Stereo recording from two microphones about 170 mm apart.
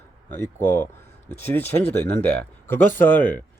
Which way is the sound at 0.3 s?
15° left (ahead or behind).